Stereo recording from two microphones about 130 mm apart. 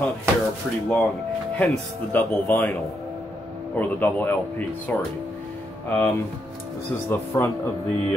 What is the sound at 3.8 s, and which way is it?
Speech, 15° left (ahead or behind).